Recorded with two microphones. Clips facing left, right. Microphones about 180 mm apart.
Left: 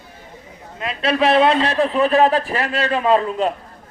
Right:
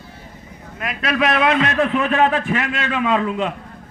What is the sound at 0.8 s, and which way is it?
A man's voice, 30° left (ahead or behind).